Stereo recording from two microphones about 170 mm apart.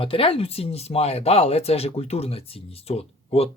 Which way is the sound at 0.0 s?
30° left (ahead or behind).